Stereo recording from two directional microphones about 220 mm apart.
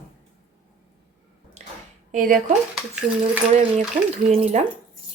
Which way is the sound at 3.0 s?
25° right (ahead or behind).